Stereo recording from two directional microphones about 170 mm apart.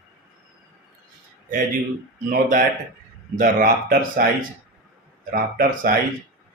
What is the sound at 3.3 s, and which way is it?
Speech, 50° right (ahead or behind).